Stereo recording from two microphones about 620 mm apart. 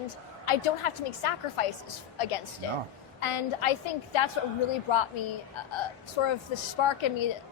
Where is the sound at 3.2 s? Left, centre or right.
Left.